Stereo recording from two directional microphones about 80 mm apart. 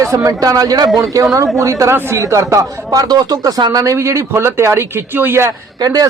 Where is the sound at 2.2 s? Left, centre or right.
Right.